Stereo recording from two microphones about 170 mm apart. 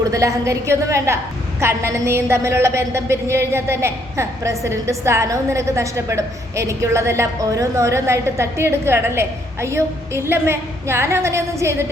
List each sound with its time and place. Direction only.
0.1 s a woman's voice: 20° right (ahead or behind)